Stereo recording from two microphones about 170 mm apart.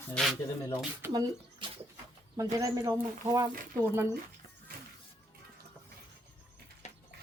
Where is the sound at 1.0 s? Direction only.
25° right (ahead or behind).